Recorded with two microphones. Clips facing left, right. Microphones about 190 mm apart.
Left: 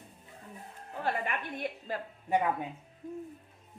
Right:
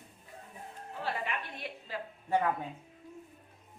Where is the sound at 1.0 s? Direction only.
50° left (ahead or behind).